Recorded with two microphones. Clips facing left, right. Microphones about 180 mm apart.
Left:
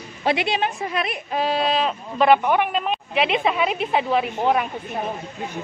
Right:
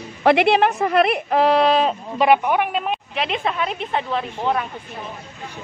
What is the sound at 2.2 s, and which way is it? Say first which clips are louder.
A woman's voice: even; 10° right (ahead or behind).